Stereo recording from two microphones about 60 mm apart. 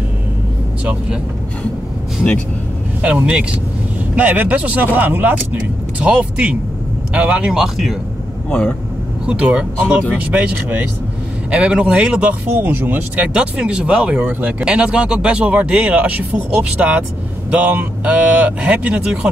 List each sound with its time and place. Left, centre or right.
4.1 s speech: right; by 8.0 s centre
8.5 s speech: centre
9.2 s speech: centre
12.5 s speech: right
13.3 s speech: centre